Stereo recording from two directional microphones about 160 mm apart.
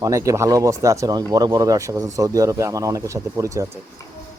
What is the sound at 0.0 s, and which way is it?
Speech, 20° right (ahead or behind).